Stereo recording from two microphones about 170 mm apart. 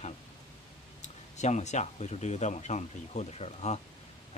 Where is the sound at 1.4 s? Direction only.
45° left (ahead or behind).